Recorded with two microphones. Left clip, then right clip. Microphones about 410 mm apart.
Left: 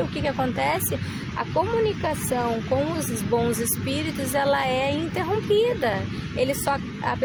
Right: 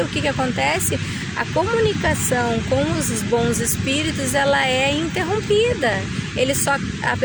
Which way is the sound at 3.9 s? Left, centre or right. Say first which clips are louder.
Right 7 dB; left.